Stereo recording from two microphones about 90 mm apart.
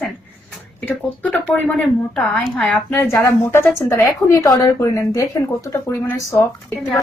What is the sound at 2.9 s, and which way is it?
A woman's voice, 25° left (ahead or behind).